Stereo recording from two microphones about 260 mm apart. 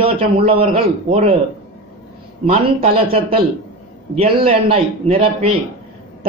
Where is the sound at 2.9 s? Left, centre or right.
Right.